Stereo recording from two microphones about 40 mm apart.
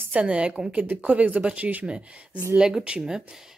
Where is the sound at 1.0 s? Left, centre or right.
Right.